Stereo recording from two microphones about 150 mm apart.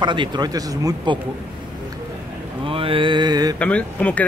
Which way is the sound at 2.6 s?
35° right (ahead or behind).